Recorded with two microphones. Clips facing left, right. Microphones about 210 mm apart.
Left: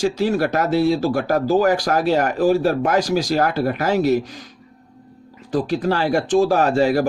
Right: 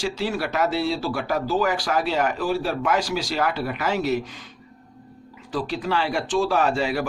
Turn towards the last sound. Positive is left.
turn(degrees=40)  # may be behind; listen again after turning